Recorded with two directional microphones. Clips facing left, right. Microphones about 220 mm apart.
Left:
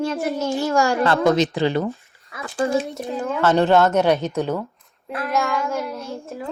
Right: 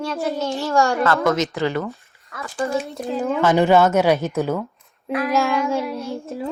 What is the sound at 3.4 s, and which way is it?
Speech, 10° right (ahead or behind).